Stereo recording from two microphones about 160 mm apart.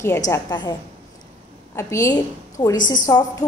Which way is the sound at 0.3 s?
25° left (ahead or behind).